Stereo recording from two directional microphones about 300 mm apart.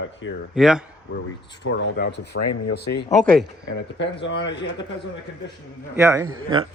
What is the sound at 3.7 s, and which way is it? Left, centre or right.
Speech, left.